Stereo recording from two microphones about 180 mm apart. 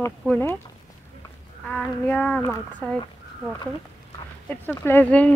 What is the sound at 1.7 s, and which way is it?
Speech, 5° left (ahead or behind).